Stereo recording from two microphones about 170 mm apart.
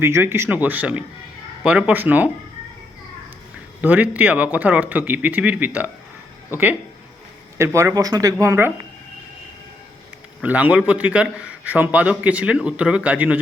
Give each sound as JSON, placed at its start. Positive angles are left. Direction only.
{"t": 0.0, "sound": "a man's voice", "side_deg": -15}
{"t": 3.8, "sound": "a man's voice", "side_deg": -10}
{"t": 10.4, "sound": "a man's voice", "side_deg": -10}